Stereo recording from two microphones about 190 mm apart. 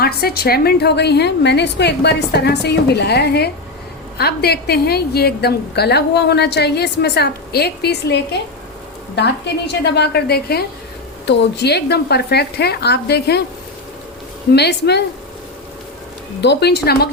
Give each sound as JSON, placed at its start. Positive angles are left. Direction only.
{"t": 0.0, "sound": "a woman's voice", "side_deg": 55}
{"t": 9.8, "sound": "a woman's voice", "side_deg": 60}
{"t": 14.5, "sound": "a woman's voice", "side_deg": 60}
{"t": 16.4, "sound": "a woman's voice", "side_deg": 60}